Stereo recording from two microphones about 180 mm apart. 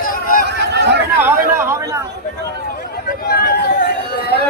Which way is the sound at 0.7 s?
70° right (ahead or behind).